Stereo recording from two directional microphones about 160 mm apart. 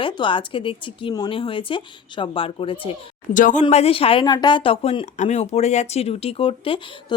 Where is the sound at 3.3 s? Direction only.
50° left (ahead or behind).